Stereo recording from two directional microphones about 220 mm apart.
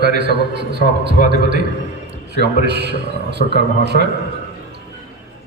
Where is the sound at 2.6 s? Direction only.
50° right (ahead or behind).